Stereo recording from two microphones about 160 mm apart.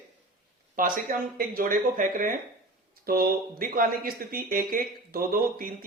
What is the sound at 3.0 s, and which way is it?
Speech, 65° right (ahead or behind).